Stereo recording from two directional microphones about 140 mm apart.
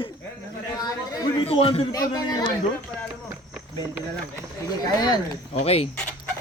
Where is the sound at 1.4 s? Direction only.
40° left (ahead or behind).